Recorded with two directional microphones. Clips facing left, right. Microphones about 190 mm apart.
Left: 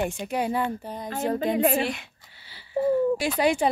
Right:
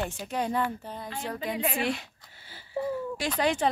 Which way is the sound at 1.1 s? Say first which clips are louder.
Left 9 dB; 45° left (ahead or behind).